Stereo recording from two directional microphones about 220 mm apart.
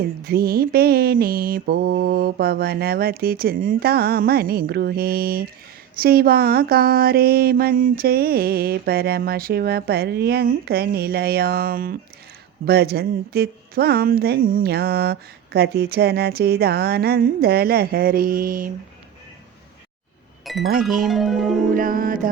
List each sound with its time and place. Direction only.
0.3 s speech: 45° right (ahead or behind)
20.4 s chink: centre (ahead or behind)
20.8 s music: centre (ahead or behind)
21.8 s music: 40° right (ahead or behind)